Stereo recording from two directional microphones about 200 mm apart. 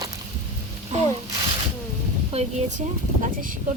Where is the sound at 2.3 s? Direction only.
30° right (ahead or behind).